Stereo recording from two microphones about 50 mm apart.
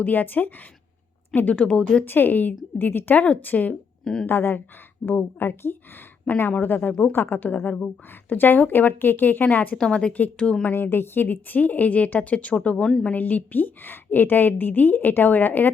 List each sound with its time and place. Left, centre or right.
0.0 s a woman's voice: left
1.5 s speech: left
2.0 s a woman's voice: left
4.0 s a woman's voice: centre
4.3 s speech: left
6.5 s a woman's voice: left
9.7 s speech: centre
10.6 s a woman's voice: left